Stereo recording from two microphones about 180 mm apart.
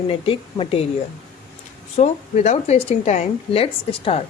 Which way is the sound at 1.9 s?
40° left (ahead or behind).